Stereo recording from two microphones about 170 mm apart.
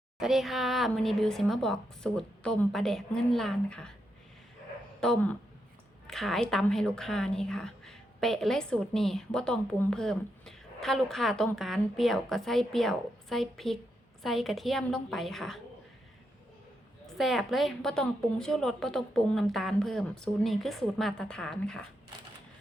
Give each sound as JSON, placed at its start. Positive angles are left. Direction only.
{"t": 0.2, "sound": "a woman's voice", "side_deg": 0}
{"t": 4.9, "sound": "a sound", "side_deg": 5}
{"t": 6.1, "sound": "a woman's voice", "side_deg": 0}
{"t": 17.1, "sound": "a woman's voice", "side_deg": 0}